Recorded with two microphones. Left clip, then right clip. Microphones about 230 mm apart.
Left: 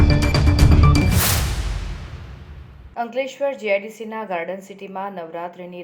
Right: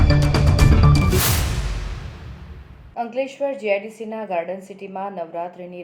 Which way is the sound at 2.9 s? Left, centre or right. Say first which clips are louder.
Even; left.